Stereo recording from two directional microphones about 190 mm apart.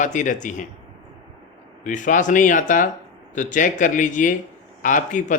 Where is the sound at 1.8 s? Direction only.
45° left (ahead or behind).